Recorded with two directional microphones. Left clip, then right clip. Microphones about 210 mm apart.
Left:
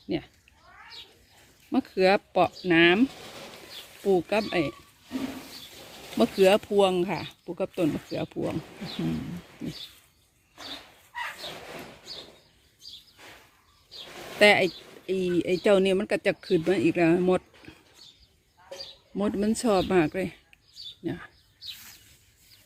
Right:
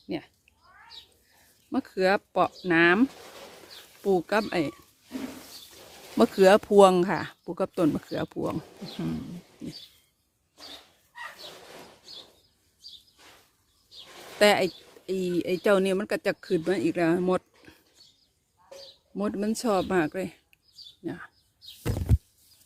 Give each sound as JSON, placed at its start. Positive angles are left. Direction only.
{"t": 1.7, "sound": "speech", "side_deg": -5}
{"t": 6.1, "sound": "speech", "side_deg": -25}
{"t": 14.3, "sound": "speech", "side_deg": -15}
{"t": 19.1, "sound": "speech", "side_deg": 0}